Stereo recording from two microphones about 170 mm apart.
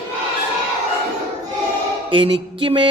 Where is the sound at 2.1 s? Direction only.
30° right (ahead or behind).